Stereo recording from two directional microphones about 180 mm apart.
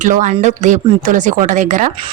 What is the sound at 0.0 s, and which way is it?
A woman's voice, 45° right (ahead or behind).